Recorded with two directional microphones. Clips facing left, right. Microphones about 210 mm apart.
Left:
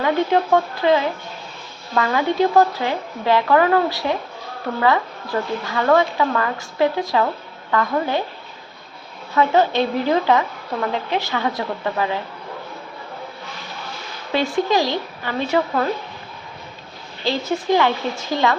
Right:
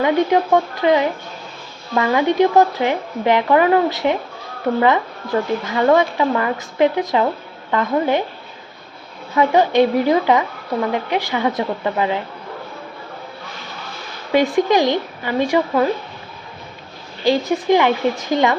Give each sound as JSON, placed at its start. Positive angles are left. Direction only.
{"t": 0.0, "sound": "a woman's voice", "side_deg": -15}
{"t": 9.3, "sound": "a woman's voice", "side_deg": -15}
{"t": 14.3, "sound": "a woman's voice", "side_deg": -20}
{"t": 17.2, "sound": "a woman's voice", "side_deg": -15}